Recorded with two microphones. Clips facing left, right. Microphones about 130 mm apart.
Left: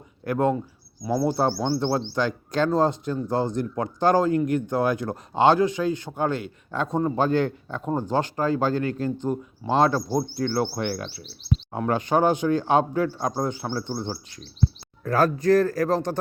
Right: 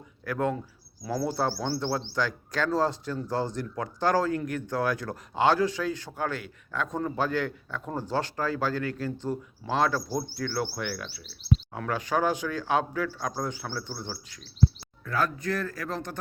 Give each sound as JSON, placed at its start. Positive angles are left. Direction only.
{"t": 0.3, "sound": "speech", "side_deg": 25}
{"t": 15.0, "sound": "speech", "side_deg": 40}